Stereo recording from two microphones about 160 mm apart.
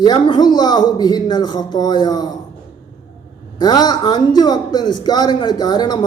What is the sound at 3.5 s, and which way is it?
Speech, 25° left (ahead or behind).